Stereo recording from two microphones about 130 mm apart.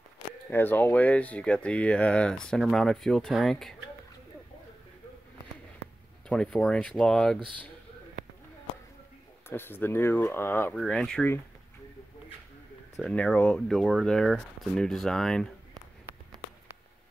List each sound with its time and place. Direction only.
0.5 s speech: 15° left (ahead or behind)
6.2 s speech: 5° left (ahead or behind)
9.5 s speech: 15° left (ahead or behind)
10.7 s speech: 5° left (ahead or behind)
12.9 s speech: 5° left (ahead or behind)